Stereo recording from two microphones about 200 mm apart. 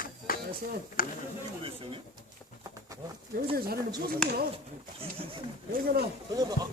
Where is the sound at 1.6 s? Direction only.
25° right (ahead or behind).